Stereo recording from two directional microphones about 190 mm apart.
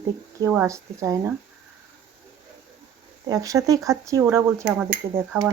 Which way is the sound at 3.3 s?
20° right (ahead or behind).